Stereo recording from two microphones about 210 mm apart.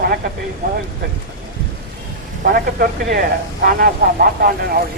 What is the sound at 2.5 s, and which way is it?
Speech, 45° right (ahead or behind).